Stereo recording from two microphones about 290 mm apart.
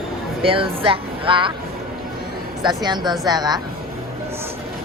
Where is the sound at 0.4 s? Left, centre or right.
Centre.